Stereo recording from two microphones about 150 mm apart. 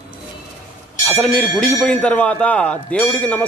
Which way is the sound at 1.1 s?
10° left (ahead or behind).